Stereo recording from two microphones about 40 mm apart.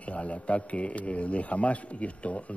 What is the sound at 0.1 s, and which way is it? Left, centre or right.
A man's voice, left.